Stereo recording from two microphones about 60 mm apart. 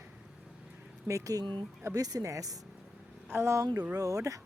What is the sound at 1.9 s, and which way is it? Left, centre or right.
Speech, right.